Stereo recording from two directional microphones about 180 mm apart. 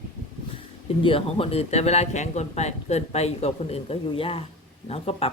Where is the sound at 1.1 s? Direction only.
30° left (ahead or behind).